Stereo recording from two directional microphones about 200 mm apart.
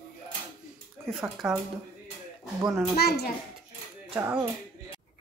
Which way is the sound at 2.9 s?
50° left (ahead or behind).